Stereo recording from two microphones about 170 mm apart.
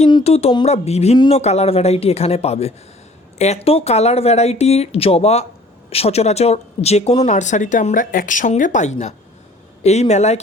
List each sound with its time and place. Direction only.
0.1 s speech: 35° left (ahead or behind)